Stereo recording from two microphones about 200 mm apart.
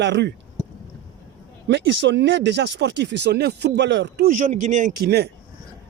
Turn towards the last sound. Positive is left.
turn(degrees=-55)  # may be behind; listen again after turning